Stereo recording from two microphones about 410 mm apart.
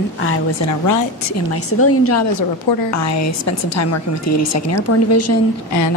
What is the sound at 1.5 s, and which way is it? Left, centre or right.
A woman's voice, left.